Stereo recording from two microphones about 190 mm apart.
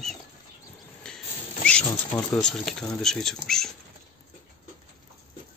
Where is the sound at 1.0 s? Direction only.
5° left (ahead or behind).